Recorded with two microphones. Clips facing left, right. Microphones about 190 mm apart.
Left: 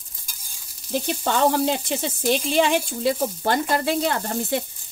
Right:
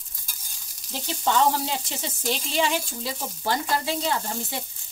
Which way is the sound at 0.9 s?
60° left (ahead or behind).